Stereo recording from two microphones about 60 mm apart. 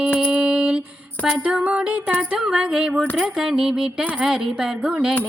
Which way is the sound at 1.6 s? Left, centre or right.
Right.